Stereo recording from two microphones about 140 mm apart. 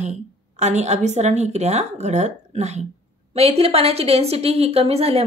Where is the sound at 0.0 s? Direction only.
55° right (ahead or behind).